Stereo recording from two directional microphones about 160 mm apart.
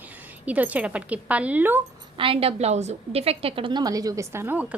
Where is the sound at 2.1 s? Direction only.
35° right (ahead or behind).